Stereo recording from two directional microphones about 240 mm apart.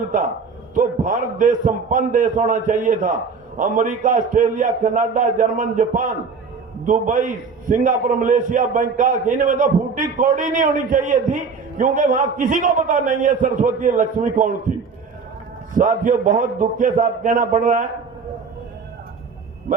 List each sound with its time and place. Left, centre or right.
0.7 s a man's voice: right
15.7 s a man's voice: right